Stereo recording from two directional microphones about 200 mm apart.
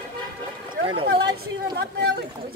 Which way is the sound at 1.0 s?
55° right (ahead or behind).